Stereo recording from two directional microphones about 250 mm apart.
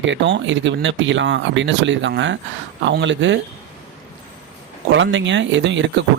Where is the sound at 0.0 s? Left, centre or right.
Right.